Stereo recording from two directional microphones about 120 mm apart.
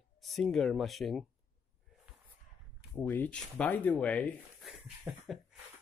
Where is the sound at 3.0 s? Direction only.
15° left (ahead or behind).